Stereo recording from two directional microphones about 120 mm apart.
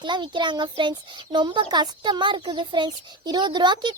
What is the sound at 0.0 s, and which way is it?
A child's voice, 40° right (ahead or behind).